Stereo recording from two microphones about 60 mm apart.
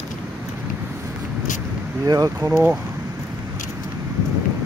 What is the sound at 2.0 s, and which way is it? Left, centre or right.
Speech, right.